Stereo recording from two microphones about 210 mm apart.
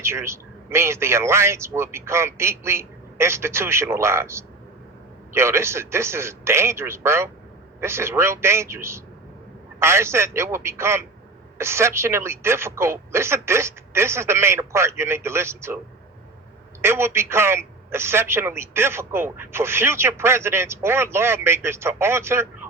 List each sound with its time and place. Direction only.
0.0 s a man's voice: 10° right (ahead or behind)
16.8 s a man's voice: 10° right (ahead or behind)